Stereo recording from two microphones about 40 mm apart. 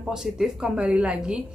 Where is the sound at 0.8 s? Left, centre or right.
Right.